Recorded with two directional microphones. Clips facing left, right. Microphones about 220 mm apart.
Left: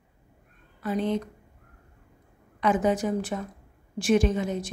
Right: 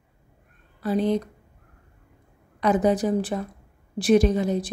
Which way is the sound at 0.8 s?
35° right (ahead or behind).